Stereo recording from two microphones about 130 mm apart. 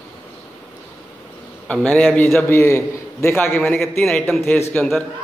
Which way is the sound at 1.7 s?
10° left (ahead or behind).